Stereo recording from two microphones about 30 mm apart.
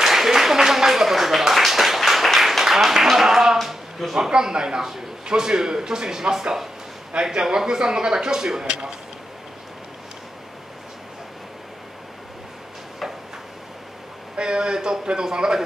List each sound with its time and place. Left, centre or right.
0.0 s a sound: centre
4.3 s speech: right
14.3 s speech: right